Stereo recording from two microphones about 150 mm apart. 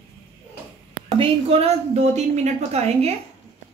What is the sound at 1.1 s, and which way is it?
A woman's voice, 40° right (ahead or behind).